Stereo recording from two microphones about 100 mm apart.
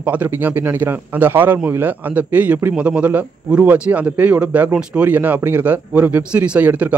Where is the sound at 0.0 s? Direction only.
15° right (ahead or behind).